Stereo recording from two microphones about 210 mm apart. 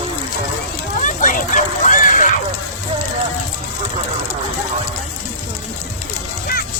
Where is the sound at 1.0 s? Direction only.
40° left (ahead or behind).